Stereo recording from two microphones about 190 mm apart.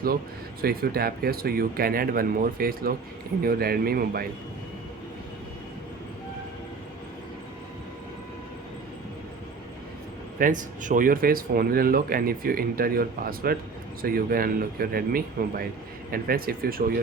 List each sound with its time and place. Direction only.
0.6 s speech: 50° right (ahead or behind)
10.3 s speech: 45° right (ahead or behind)